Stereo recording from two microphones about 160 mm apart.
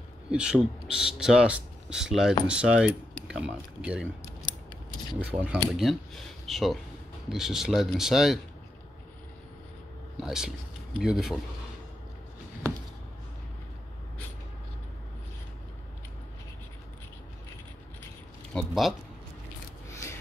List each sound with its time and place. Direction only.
0.3 s speech: 5° right (ahead or behind)
2.4 s cutlery: 5° right (ahead or behind)
3.3 s speech: 5° right (ahead or behind)
5.2 s cutlery: 10° right (ahead or behind)
5.7 s speech: centre (ahead or behind)
10.2 s speech: 5° right (ahead or behind)
18.5 s a sound: centre (ahead or behind)
19.9 s a sound: 20° left (ahead or behind)